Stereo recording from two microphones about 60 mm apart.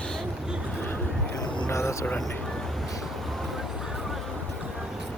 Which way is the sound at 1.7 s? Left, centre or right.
Left.